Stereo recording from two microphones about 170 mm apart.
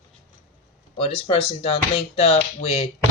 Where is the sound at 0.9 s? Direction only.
35° left (ahead or behind).